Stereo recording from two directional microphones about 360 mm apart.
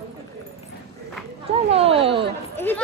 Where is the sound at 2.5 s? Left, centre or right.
Centre.